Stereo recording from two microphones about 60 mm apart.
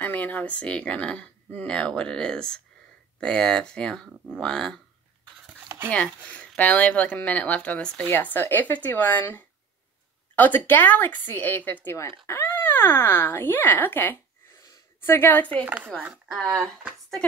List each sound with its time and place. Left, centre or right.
0.0 s speech: left; by 4.7 s centre
5.9 s speech: left
8.1 s a woman's voice: left
15.6 s speech: right